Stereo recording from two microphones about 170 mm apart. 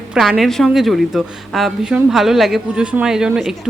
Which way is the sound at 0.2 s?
Centre (ahead or behind).